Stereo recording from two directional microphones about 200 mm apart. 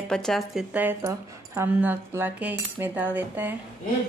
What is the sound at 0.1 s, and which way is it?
Speech, centre (ahead or behind).